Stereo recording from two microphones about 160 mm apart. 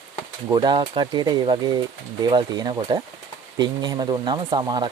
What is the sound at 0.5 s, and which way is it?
Speech, 30° right (ahead or behind).